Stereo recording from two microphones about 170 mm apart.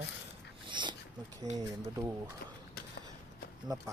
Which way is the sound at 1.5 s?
20° right (ahead or behind).